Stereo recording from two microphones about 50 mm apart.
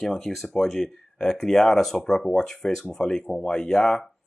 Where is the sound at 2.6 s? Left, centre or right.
Centre.